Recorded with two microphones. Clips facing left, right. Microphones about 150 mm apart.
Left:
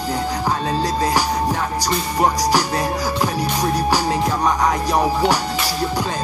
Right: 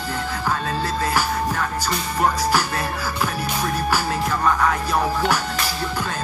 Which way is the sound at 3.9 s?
15° left (ahead or behind).